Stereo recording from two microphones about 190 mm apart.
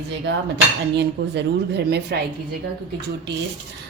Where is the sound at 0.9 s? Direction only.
65° right (ahead or behind).